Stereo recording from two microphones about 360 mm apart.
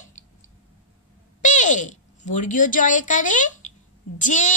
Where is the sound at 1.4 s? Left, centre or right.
Left.